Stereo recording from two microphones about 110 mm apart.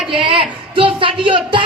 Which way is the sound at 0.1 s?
50° right (ahead or behind).